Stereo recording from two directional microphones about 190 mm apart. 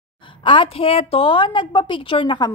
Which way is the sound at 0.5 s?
30° left (ahead or behind).